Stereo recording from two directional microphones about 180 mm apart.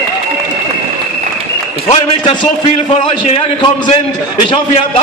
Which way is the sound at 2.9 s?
35° left (ahead or behind).